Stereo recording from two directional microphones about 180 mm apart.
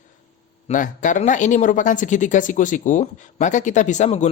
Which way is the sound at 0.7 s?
45° left (ahead or behind).